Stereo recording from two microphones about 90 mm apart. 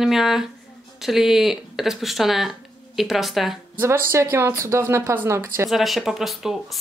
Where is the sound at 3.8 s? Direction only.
25° right (ahead or behind).